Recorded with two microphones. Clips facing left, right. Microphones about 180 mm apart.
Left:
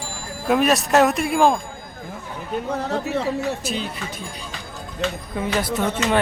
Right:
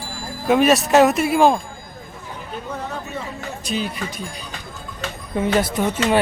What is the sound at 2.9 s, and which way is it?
Speech, 80° left.